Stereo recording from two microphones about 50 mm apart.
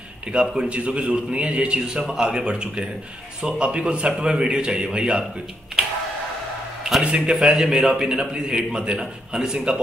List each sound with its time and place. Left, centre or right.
0.3 s a man's voice: centre
6.8 s a sound: centre
7.1 s a man's voice: right
7.8 s a man's voice: centre
8.1 s a man's voice: centre